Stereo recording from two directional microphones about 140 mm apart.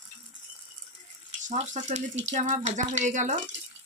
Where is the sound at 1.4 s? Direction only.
60° right (ahead or behind).